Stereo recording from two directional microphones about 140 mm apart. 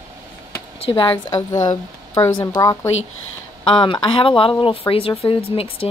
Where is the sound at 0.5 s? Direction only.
35° left (ahead or behind).